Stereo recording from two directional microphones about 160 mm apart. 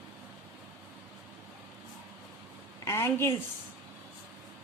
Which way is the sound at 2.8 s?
15° left (ahead or behind).